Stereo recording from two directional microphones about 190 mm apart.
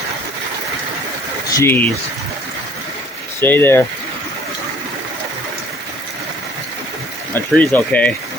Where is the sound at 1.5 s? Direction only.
15° left (ahead or behind).